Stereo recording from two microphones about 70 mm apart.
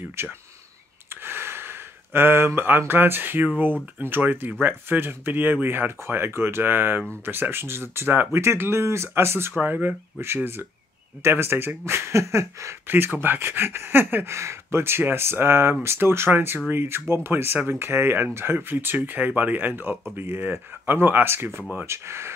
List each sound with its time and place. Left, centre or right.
0.1 s speech: right
1.2 s a sound: right
2.9 s speech: right
12.9 s speech: right